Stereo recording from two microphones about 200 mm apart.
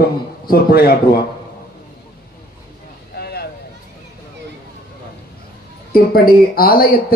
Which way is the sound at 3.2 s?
50° left (ahead or behind).